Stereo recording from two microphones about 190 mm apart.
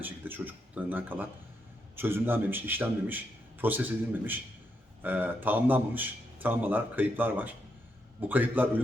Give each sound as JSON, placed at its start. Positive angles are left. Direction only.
{"t": 0.0, "sound": "a man's voice", "side_deg": -10}